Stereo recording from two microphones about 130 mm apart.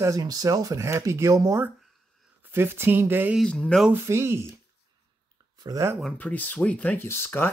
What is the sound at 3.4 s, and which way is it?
Speech, 5° left (ahead or behind).